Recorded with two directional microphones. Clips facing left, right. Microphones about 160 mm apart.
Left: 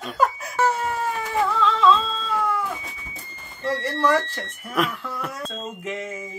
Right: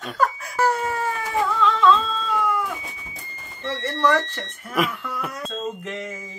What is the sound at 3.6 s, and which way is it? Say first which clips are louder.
Speech: even; 10° left (ahead or behind).